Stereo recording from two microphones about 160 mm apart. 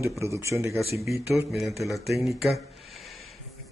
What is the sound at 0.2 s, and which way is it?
Speech, 20° right (ahead or behind).